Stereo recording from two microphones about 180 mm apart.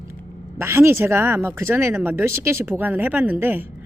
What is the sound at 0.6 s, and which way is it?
A woman's voice, 15° right (ahead or behind).